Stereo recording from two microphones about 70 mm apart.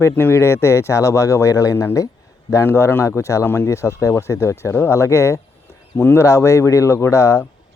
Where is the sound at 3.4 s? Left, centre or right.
Left.